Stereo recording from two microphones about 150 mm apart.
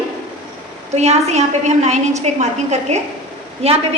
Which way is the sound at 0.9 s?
45° right (ahead or behind).